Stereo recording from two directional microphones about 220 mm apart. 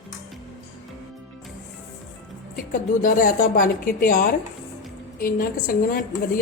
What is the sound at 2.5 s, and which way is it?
A woman's voice, 40° left (ahead or behind).